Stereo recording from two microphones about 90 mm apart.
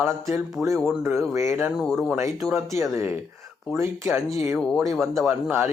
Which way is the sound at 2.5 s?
30° right (ahead or behind).